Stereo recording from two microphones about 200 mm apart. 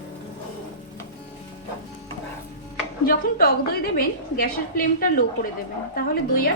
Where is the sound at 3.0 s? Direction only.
45° left (ahead or behind).